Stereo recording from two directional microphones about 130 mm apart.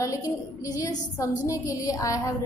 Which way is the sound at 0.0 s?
25° left (ahead or behind).